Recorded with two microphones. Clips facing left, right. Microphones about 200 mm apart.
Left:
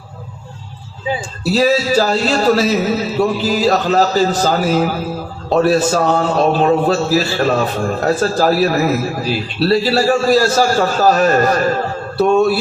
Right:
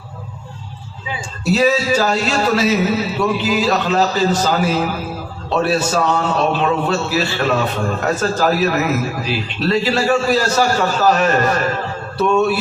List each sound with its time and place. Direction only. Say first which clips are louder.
1.0 s a man's voice: left 2 dB; 35° left (ahead or behind)